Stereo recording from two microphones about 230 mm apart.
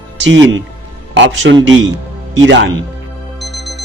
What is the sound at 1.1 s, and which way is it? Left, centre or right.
A man's voice, right.